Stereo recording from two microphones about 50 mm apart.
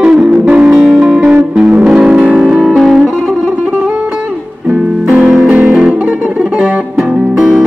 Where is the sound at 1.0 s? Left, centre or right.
Right.